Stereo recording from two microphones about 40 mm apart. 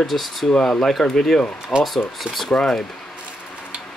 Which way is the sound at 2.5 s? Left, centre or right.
Centre.